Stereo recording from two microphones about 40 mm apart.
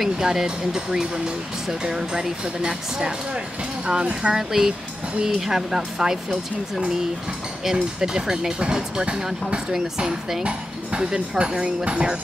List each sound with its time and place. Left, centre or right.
0.0 s speech: centre
7.7 s speech: centre
10.4 s dishes: right
11.1 s speech: right